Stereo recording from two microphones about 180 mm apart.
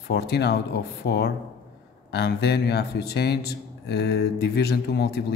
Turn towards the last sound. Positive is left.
turn(degrees=60)  # may be behind; listen again after turning